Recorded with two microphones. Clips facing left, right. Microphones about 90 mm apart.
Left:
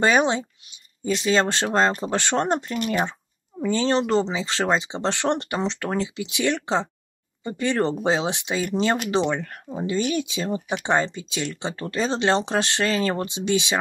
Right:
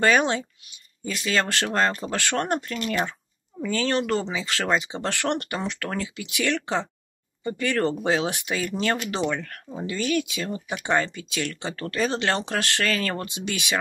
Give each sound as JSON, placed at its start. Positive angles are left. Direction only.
{"t": 0.0, "sound": "speech", "side_deg": 20}